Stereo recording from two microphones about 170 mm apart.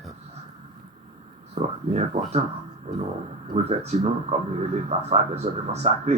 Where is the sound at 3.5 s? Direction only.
40° right (ahead or behind).